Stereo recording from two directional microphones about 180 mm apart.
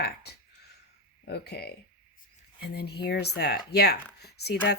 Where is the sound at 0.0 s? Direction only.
65° left (ahead or behind).